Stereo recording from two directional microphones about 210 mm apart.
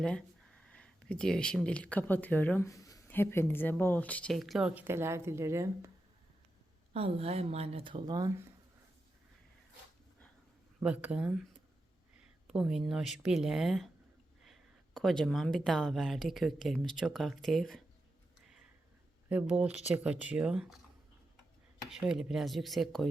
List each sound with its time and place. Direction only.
0.0 s speech: 5° left (ahead or behind); by 5.9 s 15° right (ahead or behind)
6.9 s speech: 30° right (ahead or behind)
10.8 s speech: 5° right (ahead or behind)
12.5 s speech: 5° right (ahead or behind)
19.3 s speech: 5° right (ahead or behind)
21.8 s speech: 5° right (ahead or behind)